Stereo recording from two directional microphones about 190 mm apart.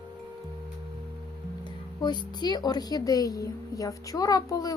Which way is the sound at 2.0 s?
25° left (ahead or behind).